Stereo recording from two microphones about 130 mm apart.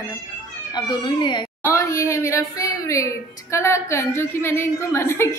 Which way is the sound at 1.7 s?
25° left (ahead or behind).